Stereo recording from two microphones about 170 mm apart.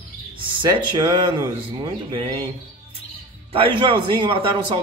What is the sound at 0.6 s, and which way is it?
A man's voice, 25° right (ahead or behind).